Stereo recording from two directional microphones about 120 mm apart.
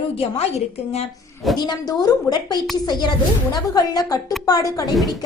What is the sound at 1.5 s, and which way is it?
A woman's voice, 35° left (ahead or behind).